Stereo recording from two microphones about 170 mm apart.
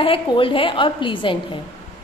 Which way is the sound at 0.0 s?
30° left (ahead or behind).